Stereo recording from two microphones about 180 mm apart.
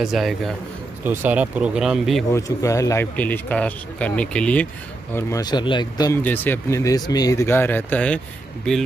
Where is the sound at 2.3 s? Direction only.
15° left (ahead or behind).